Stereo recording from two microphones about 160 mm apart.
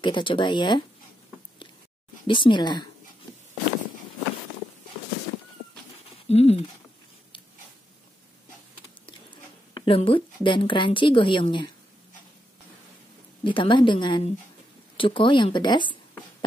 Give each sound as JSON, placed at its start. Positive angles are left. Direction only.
{"t": 0.0, "sound": "speech", "side_deg": 30}
{"t": 2.2, "sound": "speech", "side_deg": 30}
{"t": 6.2, "sound": "speech", "side_deg": 40}
{"t": 9.0, "sound": "speech", "side_deg": 35}
{"t": 13.4, "sound": "a woman's voice", "side_deg": 30}